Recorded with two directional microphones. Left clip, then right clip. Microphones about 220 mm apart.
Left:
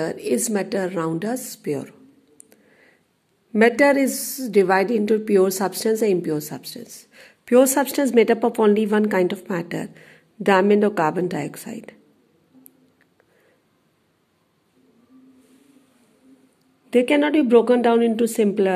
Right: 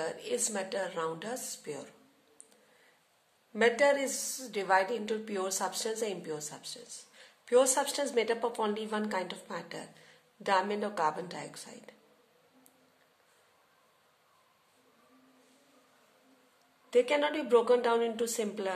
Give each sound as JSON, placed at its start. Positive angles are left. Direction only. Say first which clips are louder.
{"t": 0.0, "sound": "a woman's voice", "louder": "left 11 dB", "side_deg": 35}
{"t": 3.5, "sound": "a woman's voice", "louder": "left 10 dB", "side_deg": 40}
{"t": 16.9, "sound": "a woman's voice", "louder": "left 10 dB", "side_deg": 30}